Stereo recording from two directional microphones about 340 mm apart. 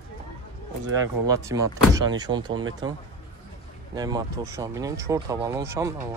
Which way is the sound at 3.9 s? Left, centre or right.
Centre.